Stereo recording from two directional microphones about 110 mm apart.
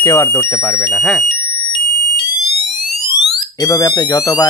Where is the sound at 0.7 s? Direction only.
5° left (ahead or behind).